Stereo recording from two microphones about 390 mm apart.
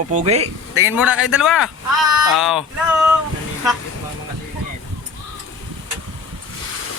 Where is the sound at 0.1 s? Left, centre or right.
Centre.